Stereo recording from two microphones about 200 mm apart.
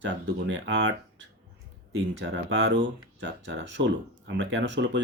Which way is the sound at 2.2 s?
60° right (ahead or behind).